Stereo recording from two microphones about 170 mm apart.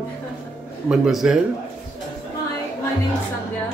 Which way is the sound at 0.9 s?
Centre (ahead or behind).